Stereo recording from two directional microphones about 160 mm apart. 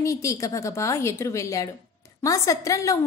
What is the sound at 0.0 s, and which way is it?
A woman's voice, 20° left (ahead or behind).